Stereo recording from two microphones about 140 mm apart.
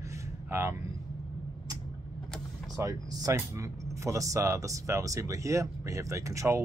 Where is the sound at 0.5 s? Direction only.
20° right (ahead or behind).